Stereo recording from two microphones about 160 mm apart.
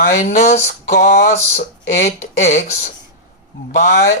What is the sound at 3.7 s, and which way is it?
Speech, 80° left.